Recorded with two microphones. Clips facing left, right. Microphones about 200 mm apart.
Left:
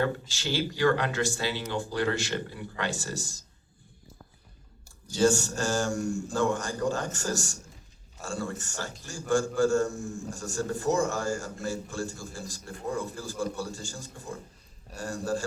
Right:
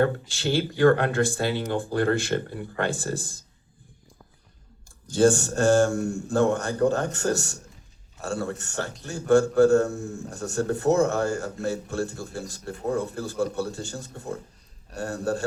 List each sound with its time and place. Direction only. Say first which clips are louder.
0.0 s speech: right 6 dB; 55° right (ahead or behind)
5.1 s a man's voice: right 4 dB; 55° right (ahead or behind)